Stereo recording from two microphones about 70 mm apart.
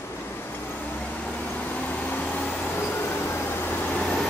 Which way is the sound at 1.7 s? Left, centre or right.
Left.